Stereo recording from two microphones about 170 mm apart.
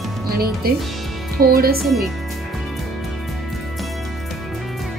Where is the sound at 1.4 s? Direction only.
60° right (ahead or behind).